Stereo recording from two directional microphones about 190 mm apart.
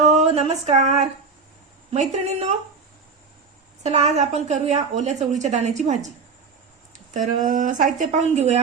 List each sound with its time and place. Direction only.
0.0 s a sound: 35° right (ahead or behind)
1.9 s a woman's voice: 35° right (ahead or behind)
3.8 s a woman's voice: 35° right (ahead or behind)